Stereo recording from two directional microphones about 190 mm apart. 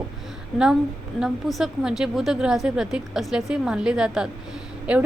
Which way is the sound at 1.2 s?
Centre (ahead or behind).